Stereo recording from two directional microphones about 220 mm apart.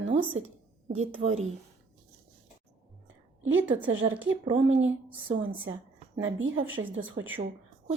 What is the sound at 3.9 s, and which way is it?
Speech, 60° right (ahead or behind).